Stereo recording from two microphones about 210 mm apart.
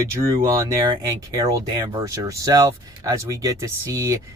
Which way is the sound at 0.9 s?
15° right (ahead or behind).